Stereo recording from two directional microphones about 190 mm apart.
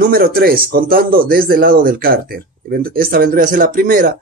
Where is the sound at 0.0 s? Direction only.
50° right (ahead or behind).